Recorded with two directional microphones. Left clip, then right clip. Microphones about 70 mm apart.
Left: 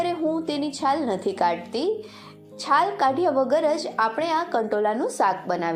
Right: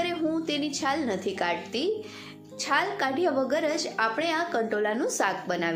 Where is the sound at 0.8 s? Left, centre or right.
Left.